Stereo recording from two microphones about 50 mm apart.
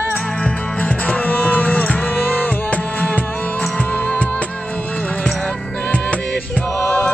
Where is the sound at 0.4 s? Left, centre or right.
Left.